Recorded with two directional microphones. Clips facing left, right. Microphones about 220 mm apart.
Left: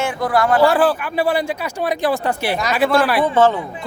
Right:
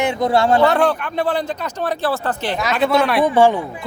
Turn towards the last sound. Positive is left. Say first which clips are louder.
# right 1 dB
turn(degrees=-15)  # may be behind; listen again after turning